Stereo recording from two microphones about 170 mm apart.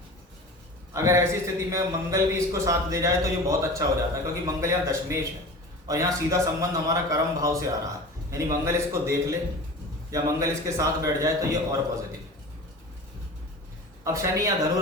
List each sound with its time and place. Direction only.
0.9 s a man's voice: 15° right (ahead or behind)
14.0 s a man's voice: 20° right (ahead or behind)